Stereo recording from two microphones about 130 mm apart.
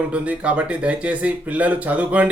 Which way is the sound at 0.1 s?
10° right (ahead or behind).